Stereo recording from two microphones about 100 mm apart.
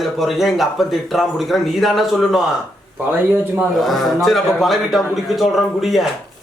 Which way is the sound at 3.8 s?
Centre (ahead or behind).